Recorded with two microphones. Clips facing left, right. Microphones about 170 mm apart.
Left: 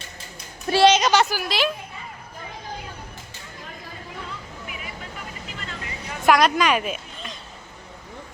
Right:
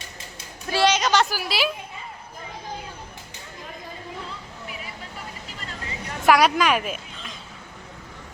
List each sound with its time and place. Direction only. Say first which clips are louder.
0.7 s a sound: left 4 dB; 30° left (ahead or behind)
1.1 s a woman's voice: left 2 dB; centre (ahead or behind)
6.2 s speech: even; 5° right (ahead or behind)